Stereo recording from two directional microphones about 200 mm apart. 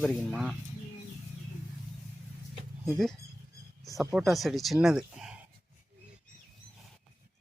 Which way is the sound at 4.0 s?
Centre (ahead or behind).